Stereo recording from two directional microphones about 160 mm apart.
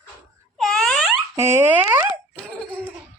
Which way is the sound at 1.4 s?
15° right (ahead or behind).